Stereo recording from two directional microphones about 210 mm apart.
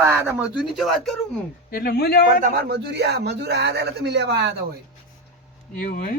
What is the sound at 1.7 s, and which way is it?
Speech, 45° left (ahead or behind).